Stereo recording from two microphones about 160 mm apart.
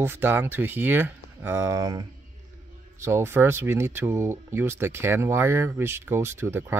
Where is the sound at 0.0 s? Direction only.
15° right (ahead or behind).